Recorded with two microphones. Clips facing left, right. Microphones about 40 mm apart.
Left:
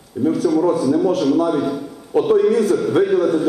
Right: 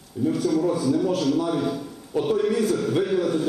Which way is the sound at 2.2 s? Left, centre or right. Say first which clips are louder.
Left 7 dB; left.